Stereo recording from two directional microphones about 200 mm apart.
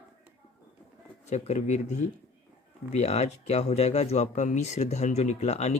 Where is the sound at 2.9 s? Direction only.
35° left (ahead or behind).